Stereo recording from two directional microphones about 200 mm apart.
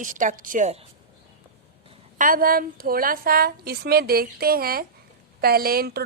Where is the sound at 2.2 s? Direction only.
45° right (ahead or behind).